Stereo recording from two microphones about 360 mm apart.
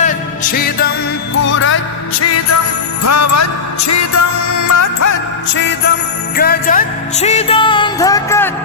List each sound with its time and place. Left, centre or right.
0.0 s music: left
5.5 s music: left; by 8.4 s centre